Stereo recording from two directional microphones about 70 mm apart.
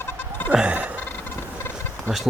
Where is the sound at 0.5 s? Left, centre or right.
Centre.